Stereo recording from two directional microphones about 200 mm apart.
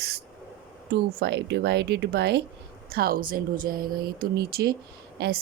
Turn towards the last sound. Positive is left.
turn(degrees=-50)  # may be behind; listen again after turning